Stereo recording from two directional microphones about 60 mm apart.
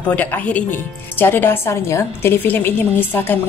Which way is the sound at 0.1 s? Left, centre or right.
Left.